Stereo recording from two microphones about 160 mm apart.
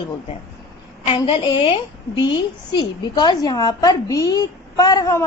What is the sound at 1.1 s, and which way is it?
A woman's voice, 30° left (ahead or behind).